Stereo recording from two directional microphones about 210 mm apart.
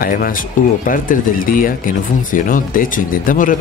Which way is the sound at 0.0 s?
40° left (ahead or behind).